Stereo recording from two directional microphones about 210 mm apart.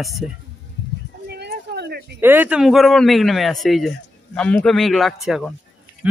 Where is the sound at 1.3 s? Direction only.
50° right (ahead or behind).